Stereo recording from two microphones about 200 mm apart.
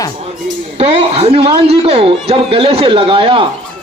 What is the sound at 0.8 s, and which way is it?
A man's voice, 30° right (ahead or behind).